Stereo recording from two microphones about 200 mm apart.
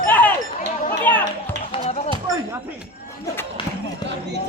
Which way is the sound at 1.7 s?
30° left (ahead or behind).